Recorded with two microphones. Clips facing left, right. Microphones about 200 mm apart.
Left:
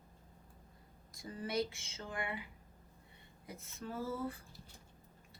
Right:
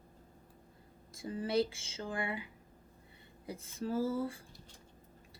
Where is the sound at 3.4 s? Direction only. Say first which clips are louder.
Right 8 dB; 30° right (ahead or behind).